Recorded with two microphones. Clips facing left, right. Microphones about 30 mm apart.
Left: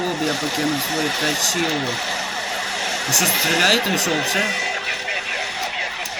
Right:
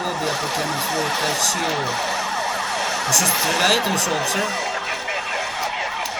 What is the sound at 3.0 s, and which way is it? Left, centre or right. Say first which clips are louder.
Speech: left 1 dB; centre.